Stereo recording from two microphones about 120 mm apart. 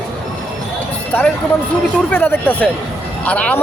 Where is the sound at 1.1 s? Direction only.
15° left (ahead or behind).